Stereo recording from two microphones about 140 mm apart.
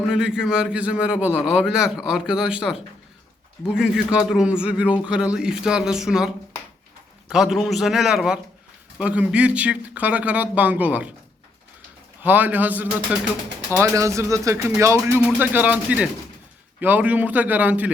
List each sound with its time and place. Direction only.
0.1 s a man's voice: 5° right (ahead or behind)
12.2 s speech: 15° right (ahead or behind)